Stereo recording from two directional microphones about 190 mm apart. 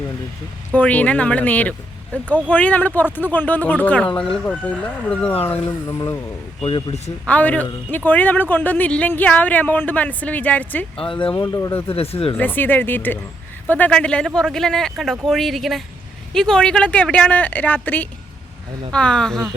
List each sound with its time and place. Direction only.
0.7 s a man's voice: 5° left (ahead or behind)
6.6 s speech: 25° left (ahead or behind)
7.3 s a man's voice: 5° left (ahead or behind)
11.1 s speech: 25° left (ahead or behind)
11.9 s speech: 30° left (ahead or behind)
12.3 s a man's voice: 10° left (ahead or behind)